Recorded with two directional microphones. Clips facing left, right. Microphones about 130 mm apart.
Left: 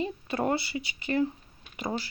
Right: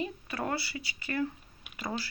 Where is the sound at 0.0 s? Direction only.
25° left (ahead or behind).